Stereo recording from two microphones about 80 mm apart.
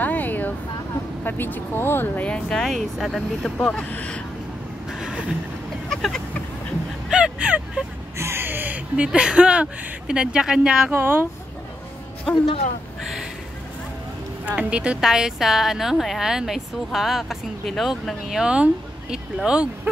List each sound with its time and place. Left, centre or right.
0.0 s a sound: left
1.2 s speech: left
2.2 s speech: centre
3.5 s speech: centre
5.9 s a sound: centre
7.1 s vehicle: centre
8.2 s speech: right; by 10.9 s centre
10.9 s speech: right
12.3 s speech: centre
14.4 s speech: centre